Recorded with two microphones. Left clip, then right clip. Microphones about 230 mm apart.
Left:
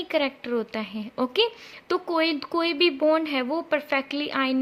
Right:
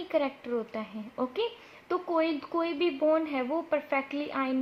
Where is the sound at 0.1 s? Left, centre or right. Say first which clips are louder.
Left 4 dB; left.